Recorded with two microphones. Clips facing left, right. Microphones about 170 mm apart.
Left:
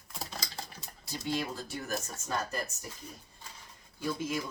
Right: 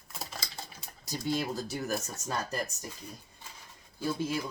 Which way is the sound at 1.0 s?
40° right (ahead or behind).